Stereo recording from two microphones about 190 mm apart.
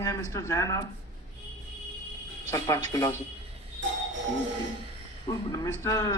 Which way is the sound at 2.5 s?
20° left (ahead or behind).